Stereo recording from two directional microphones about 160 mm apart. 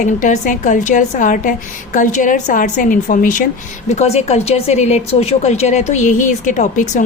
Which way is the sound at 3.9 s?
45° left (ahead or behind).